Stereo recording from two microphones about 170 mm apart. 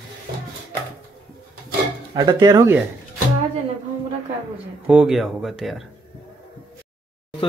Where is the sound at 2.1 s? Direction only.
25° right (ahead or behind).